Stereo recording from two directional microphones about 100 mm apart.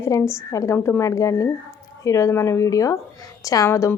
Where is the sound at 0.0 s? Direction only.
30° left (ahead or behind).